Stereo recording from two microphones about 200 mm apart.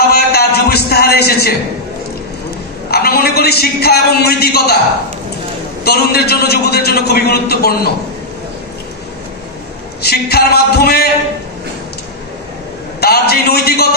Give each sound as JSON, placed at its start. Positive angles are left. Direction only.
{"t": 0.1, "sound": "a sound", "side_deg": 50}
{"t": 2.9, "sound": "a man's voice", "side_deg": 50}
{"t": 5.9, "sound": "a man's voice", "side_deg": 50}
{"t": 10.0, "sound": "a man's voice", "side_deg": 55}
{"t": 13.0, "sound": "a man's voice", "side_deg": 50}